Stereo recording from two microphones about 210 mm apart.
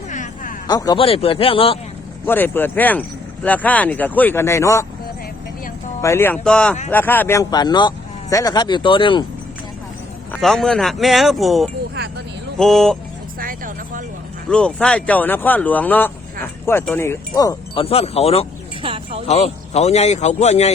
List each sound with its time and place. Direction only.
0.1 s a sound: 35° left (ahead or behind)
0.7 s speech: 20° left (ahead or behind)
2.2 s speech: 10° left (ahead or behind)
6.0 s speech: 10° left (ahead or behind)
10.3 s speech: centre (ahead or behind)
13.4 s vehicle: 40° right (ahead or behind)
14.5 s speech: 5° left (ahead or behind)
17.8 s speech: 30° left (ahead or behind)
18.8 s music: 25° right (ahead or behind)
19.3 s a man's voice: 30° left (ahead or behind)